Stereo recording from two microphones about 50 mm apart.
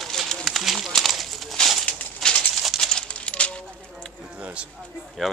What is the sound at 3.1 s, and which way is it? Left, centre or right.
Coin, left.